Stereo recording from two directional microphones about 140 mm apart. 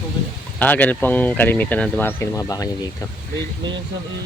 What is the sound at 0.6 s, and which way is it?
Speech, 10° left (ahead or behind).